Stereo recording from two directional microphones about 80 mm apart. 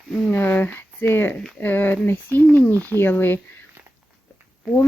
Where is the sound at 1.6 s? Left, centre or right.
Left.